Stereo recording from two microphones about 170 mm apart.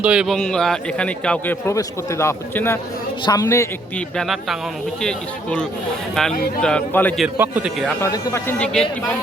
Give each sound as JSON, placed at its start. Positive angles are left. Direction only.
{"t": 0.0, "sound": "a man's voice", "side_deg": -5}
{"t": 4.2, "sound": "a man's voice", "side_deg": 0}
{"t": 7.3, "sound": "a man's voice", "side_deg": -10}
{"t": 8.0, "sound": "a man's voice", "side_deg": 20}